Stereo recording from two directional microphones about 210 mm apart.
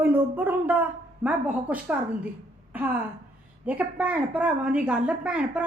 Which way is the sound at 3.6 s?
5° right (ahead or behind).